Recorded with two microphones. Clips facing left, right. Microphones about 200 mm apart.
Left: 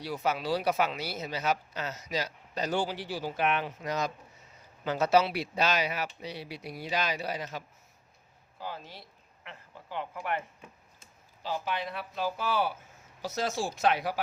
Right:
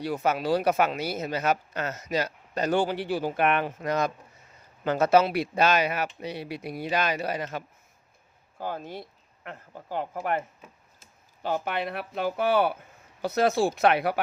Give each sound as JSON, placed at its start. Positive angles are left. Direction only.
{"t": 0.0, "sound": "speech", "side_deg": -50}
{"t": 11.4, "sound": "speech", "side_deg": -55}